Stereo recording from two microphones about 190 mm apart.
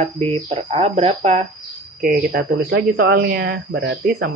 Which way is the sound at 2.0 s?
45° right (ahead or behind).